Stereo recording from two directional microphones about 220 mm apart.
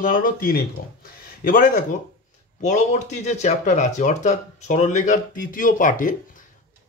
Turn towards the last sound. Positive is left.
turn(degrees=35)  # may be behind; listen again after turning